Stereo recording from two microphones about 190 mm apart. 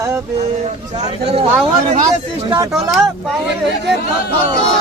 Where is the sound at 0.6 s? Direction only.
35° right (ahead or behind).